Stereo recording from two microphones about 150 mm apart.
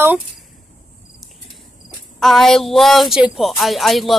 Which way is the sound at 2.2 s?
Centre (ahead or behind).